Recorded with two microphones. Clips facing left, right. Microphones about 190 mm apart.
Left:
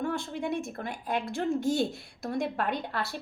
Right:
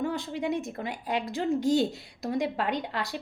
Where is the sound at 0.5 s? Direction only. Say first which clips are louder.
Right 1 dB; 20° right (ahead or behind).